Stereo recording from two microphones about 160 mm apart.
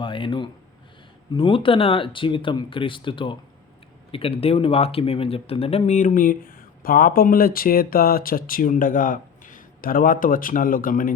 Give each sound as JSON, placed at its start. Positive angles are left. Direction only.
{"t": 0.0, "sound": "speech", "side_deg": 30}